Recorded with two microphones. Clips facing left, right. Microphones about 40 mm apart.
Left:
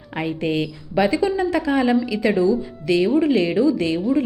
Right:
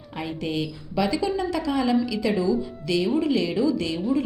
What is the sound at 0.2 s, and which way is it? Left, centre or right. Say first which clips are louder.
A woman's voice: left 6 dB; left.